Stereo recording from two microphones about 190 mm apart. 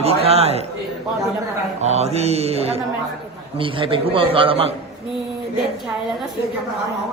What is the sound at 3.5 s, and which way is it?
A man's voice, 25° right (ahead or behind).